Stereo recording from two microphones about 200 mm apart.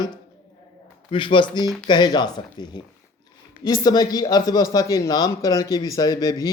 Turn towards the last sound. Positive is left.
turn(degrees=20)  # may be behind; listen again after turning